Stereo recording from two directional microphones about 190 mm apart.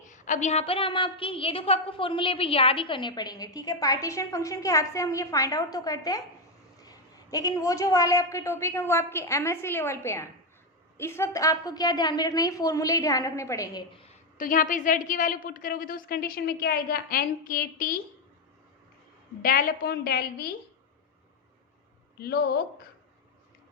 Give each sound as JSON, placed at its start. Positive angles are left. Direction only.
{"t": 0.1, "sound": "a woman's voice", "side_deg": 40}
{"t": 13.9, "sound": "a sound", "side_deg": 30}
{"t": 14.3, "sound": "a woman's voice", "side_deg": 45}
{"t": 19.4, "sound": "a woman's voice", "side_deg": 50}
{"t": 22.2, "sound": "speech", "side_deg": 55}